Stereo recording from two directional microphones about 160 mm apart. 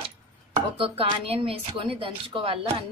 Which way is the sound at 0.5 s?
35° right (ahead or behind).